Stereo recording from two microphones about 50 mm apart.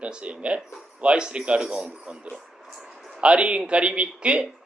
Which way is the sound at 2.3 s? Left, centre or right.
Centre.